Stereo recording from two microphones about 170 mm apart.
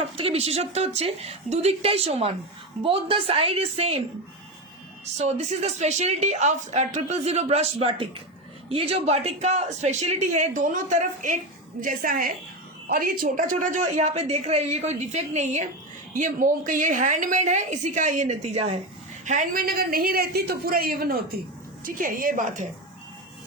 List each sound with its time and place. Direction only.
0.2 s a woman's voice: 35° right (ahead or behind)
5.1 s a woman's voice: 40° right (ahead or behind)